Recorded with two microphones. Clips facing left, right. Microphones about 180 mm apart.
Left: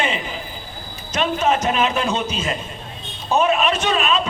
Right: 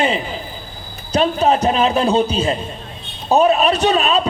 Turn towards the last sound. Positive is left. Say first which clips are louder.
# right 4 dB
turn(degrees=-35)  # may be behind; listen again after turning